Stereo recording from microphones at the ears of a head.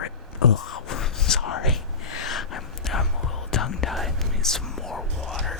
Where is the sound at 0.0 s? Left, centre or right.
Left.